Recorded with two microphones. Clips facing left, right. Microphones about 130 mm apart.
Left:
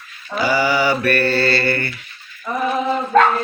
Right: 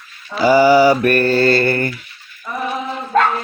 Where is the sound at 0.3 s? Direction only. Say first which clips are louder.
Right 7 dB; 40° right (ahead or behind).